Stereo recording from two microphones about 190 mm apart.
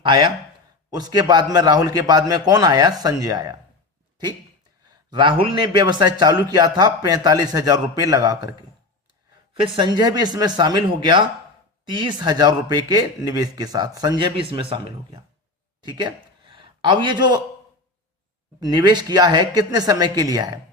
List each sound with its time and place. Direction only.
0.1 s a man's voice: 25° right (ahead or behind)
4.9 s a man's voice: 25° right (ahead or behind)
9.7 s a man's voice: 20° right (ahead or behind)
18.6 s a man's voice: 20° right (ahead or behind)